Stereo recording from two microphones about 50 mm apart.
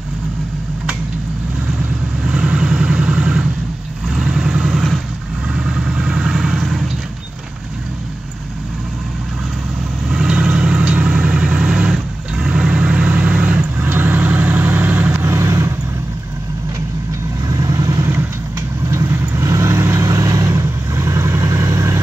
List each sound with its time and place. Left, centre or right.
2.2 s vehicle: right; by 6.9 s centre
10.0 s vehicle: centre; by 15.1 s right
15.2 s vehicle: right
18.9 s vehicle: right